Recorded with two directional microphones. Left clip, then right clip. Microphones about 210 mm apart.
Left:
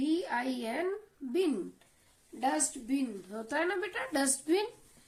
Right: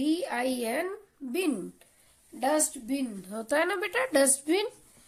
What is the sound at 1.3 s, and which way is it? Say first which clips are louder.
A woman's voice: right 1 dB; 45° right (ahead or behind).